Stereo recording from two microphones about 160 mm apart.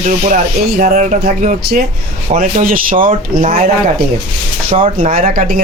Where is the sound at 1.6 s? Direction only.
80° right.